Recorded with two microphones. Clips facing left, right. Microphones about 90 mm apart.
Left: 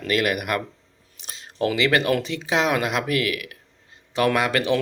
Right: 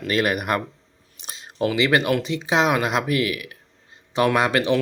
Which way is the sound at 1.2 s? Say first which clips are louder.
Right 1 dB; 20° right (ahead or behind).